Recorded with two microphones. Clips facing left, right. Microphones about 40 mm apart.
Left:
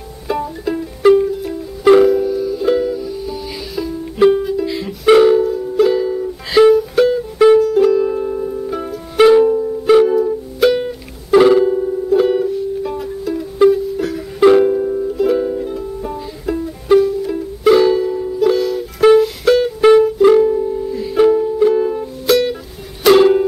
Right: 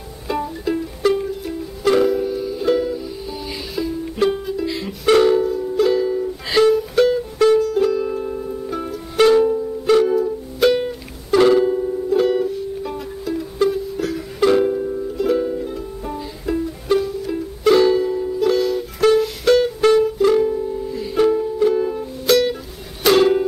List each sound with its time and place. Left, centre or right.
0.3 s music: centre
7.3 s music: centre
7.6 s music: centre
14.6 s music: centre
18.9 s music: centre
19.4 s music: centre